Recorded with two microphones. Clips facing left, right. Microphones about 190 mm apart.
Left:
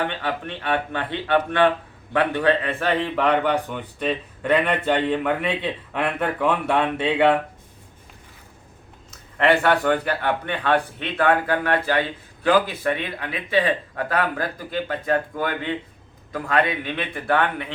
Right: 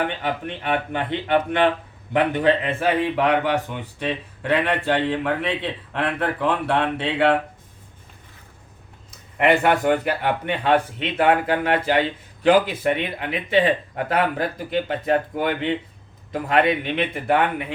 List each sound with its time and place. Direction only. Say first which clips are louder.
0.0 s a man's voice: right 1 dB; 15° right (ahead or behind)
3.0 s a man's voice: right 1 dB; 5° right (ahead or behind)
9.4 s a man's voice: right 1 dB; 15° right (ahead or behind)